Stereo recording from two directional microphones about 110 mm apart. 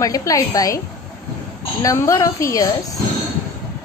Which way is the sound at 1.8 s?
30° left (ahead or behind).